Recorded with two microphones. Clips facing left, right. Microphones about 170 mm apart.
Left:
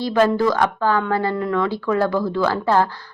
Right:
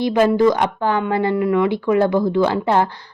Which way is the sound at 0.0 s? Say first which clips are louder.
Right 3 dB; 15° right (ahead or behind).